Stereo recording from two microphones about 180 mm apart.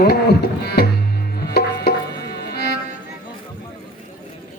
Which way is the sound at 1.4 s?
60° left (ahead or behind).